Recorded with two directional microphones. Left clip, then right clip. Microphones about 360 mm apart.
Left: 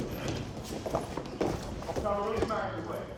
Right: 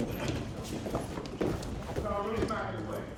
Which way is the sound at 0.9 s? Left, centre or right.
Centre.